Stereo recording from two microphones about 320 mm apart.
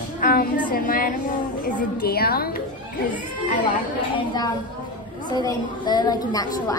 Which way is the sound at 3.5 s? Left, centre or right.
Centre.